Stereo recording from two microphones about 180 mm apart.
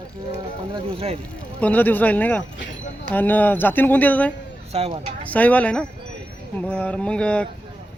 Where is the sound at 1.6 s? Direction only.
10° left (ahead or behind).